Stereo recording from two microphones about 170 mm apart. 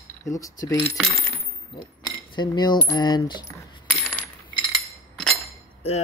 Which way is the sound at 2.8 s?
20° left (ahead or behind).